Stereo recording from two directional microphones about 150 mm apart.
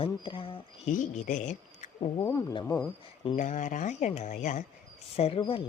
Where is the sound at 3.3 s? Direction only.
60° left (ahead or behind).